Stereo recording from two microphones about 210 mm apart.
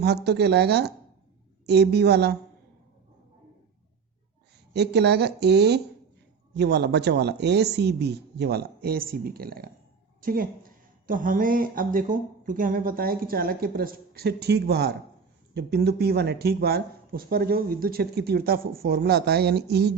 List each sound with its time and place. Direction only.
0.0 s speech: 50° right (ahead or behind)
4.7 s speech: 55° right (ahead or behind)